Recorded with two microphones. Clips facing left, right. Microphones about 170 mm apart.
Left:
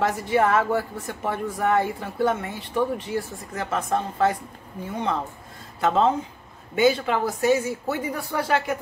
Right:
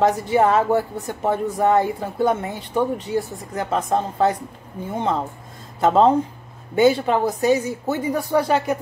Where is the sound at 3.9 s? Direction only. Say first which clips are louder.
Right 2 dB; 20° right (ahead or behind).